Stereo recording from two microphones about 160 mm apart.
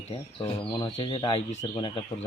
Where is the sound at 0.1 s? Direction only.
35° left (ahead or behind).